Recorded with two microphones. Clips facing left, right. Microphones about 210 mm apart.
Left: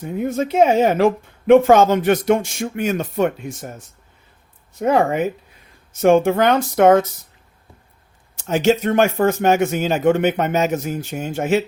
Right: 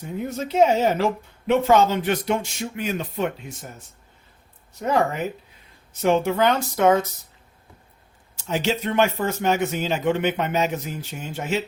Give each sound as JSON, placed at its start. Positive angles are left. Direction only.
{"t": 0.0, "sound": "speech", "side_deg": 50}
{"t": 4.8, "sound": "speech", "side_deg": 55}
{"t": 8.4, "sound": "speech", "side_deg": 50}